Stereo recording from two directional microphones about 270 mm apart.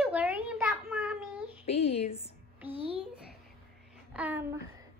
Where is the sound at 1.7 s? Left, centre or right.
Left.